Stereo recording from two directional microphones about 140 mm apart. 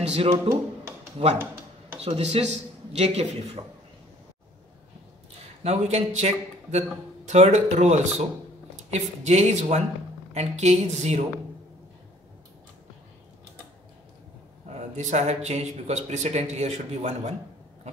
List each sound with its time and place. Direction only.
0.0 s speech: 50° right (ahead or behind)
2.1 s speech: 50° right (ahead or behind)
5.6 s speech: 50° right (ahead or behind)
14.7 s speech: 55° right (ahead or behind)